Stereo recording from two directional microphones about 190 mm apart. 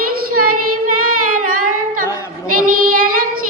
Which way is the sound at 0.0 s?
50° right (ahead or behind).